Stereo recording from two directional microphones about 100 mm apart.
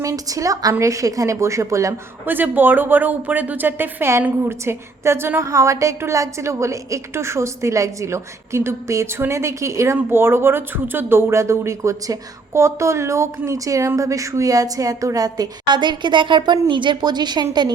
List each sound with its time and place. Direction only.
0.0 s a woman's voice: 35° right (ahead or behind)
2.2 s a woman's voice: 20° right (ahead or behind); by 17.4 s 45° right (ahead or behind)